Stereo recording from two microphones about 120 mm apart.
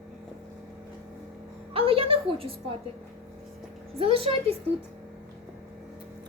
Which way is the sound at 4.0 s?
55° right (ahead or behind).